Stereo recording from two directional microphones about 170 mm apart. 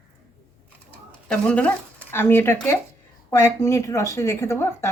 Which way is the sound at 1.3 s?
5° left (ahead or behind).